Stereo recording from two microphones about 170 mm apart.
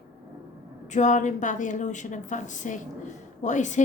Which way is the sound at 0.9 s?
45° left (ahead or behind).